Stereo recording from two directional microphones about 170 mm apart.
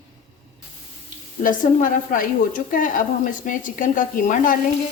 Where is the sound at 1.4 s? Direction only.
50° left (ahead or behind).